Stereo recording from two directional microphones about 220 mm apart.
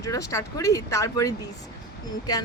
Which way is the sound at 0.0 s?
15° left (ahead or behind).